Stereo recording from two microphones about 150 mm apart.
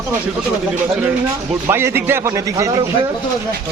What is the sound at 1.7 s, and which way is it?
A man's voice, 15° right (ahead or behind).